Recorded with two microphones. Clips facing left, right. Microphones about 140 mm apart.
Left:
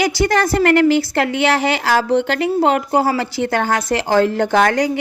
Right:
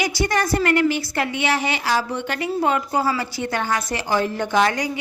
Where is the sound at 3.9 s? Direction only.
80° left.